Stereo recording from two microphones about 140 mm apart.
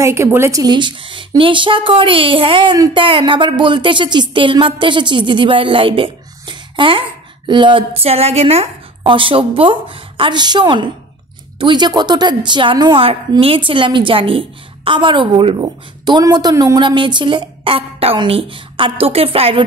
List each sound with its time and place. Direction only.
0.0 s a woman's voice: 20° right (ahead or behind); by 19.6 s 45° right (ahead or behind)